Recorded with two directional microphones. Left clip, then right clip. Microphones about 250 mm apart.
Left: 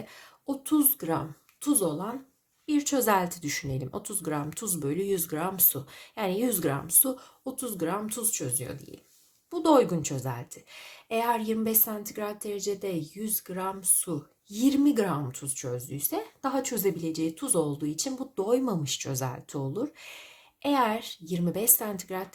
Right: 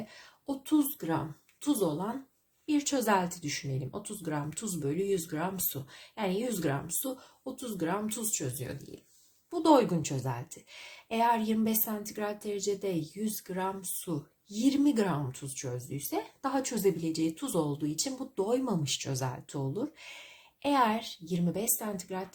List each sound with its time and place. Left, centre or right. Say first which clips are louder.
0.4 s speech: left 3 dB; centre